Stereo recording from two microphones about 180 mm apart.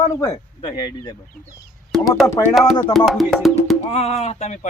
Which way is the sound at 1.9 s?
Centre (ahead or behind).